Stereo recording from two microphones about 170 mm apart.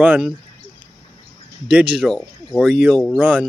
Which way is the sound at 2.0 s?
5° left (ahead or behind).